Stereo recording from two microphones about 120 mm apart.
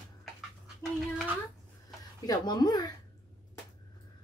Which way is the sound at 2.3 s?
35° left (ahead or behind).